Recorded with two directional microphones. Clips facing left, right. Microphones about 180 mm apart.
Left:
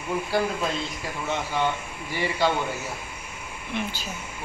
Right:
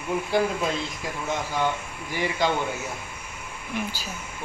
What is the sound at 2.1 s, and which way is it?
Speech, 15° right (ahead or behind).